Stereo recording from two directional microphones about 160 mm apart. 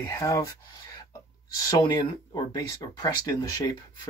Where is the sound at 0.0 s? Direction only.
20° left (ahead or behind).